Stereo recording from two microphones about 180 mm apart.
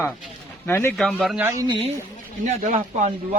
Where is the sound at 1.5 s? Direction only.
20° right (ahead or behind).